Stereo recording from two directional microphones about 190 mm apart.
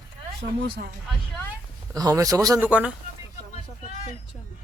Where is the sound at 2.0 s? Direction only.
20° right (ahead or behind).